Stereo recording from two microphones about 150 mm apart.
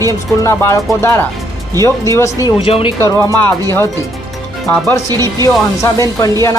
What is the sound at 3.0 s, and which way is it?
Speech, 20° left (ahead or behind).